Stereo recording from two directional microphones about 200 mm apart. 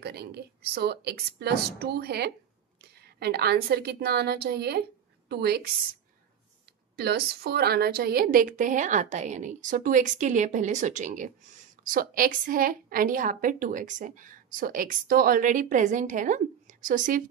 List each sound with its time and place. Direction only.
0.0 s a woman's voice: 55° right (ahead or behind)
7.0 s a woman's voice: 50° right (ahead or behind)